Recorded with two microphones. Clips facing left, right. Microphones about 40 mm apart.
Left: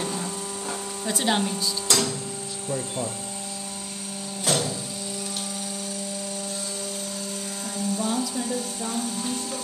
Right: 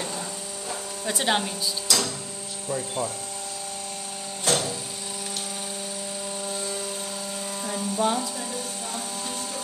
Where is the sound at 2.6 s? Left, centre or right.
Right.